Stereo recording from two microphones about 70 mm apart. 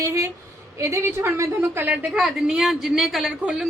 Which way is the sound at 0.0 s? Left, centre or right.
Right.